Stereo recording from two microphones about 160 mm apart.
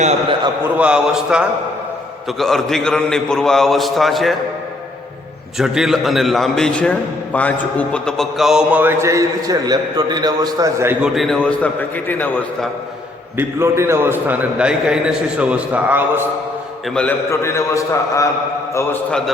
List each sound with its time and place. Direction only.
0.8 s a man's voice: 5° right (ahead or behind)
5.5 s a man's voice: centre (ahead or behind); by 10.9 s 20° right (ahead or behind)
11.0 s a man's voice: centre (ahead or behind)
13.3 s a man's voice: 15° right (ahead or behind)
16.9 s a man's voice: 5° left (ahead or behind)
17.2 s a man's voice: 20° left (ahead or behind)